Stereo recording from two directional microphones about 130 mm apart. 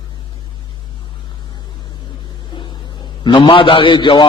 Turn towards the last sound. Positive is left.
turn(degrees=40)  # may be behind; listen again after turning